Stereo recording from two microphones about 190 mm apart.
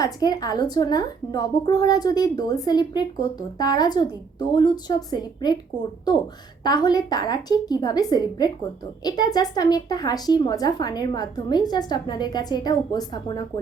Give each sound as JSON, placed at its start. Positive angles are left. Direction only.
{"t": 0.0, "sound": "speech", "side_deg": 20}